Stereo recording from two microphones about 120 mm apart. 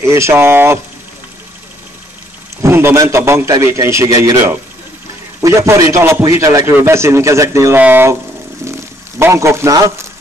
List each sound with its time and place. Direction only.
0.0 s a man's voice: 25° right (ahead or behind)
2.6 s a man's voice: 20° right (ahead or behind)
9.2 s a man's voice: 20° right (ahead or behind)